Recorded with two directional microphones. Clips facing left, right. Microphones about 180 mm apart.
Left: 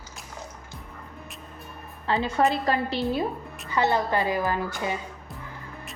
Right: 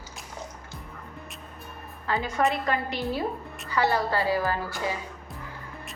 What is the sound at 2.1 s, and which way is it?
A woman's voice, 25° left (ahead or behind).